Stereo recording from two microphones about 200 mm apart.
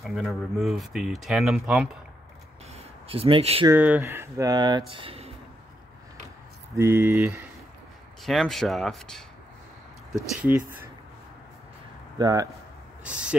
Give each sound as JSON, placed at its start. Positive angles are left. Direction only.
{"t": 0.0, "sound": "speech", "side_deg": 0}
{"t": 2.7, "sound": "a sound", "side_deg": -30}
{"t": 3.6, "sound": "speech", "side_deg": -10}
{"t": 6.7, "sound": "speech", "side_deg": -15}
{"t": 8.2, "sound": "speech", "side_deg": 0}
{"t": 10.5, "sound": "speech", "side_deg": -10}
{"t": 12.2, "sound": "speech", "side_deg": -20}
{"t": 13.0, "sound": "speech", "side_deg": -5}